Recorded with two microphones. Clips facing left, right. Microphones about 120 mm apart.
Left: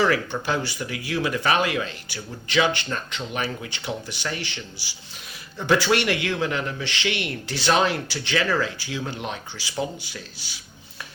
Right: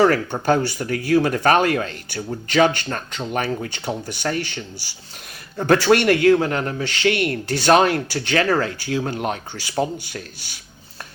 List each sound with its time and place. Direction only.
0.0 s speech: 45° right (ahead or behind)